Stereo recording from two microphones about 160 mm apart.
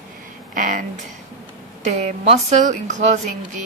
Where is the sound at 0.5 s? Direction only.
55° right (ahead or behind).